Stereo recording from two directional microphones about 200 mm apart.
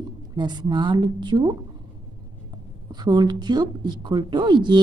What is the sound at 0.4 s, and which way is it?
A woman's voice, 20° right (ahead or behind).